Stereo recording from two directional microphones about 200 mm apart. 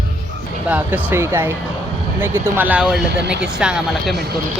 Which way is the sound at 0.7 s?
10° right (ahead or behind).